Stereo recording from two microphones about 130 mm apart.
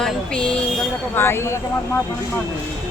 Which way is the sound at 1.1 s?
20° left (ahead or behind).